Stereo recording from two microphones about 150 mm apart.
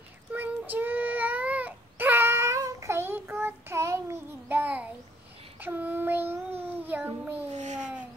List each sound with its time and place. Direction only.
0.3 s a sound: 10° right (ahead or behind)
5.6 s child singing: 10° right (ahead or behind)
7.5 s babbling: 50° right (ahead or behind)